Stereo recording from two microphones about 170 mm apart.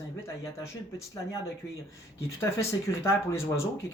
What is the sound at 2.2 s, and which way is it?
Speech, 15° left (ahead or behind).